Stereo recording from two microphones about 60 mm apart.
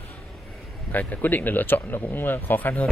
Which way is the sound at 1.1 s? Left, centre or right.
Left.